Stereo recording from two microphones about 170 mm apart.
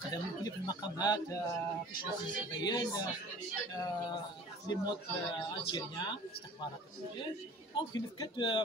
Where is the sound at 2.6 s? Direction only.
25° left (ahead or behind).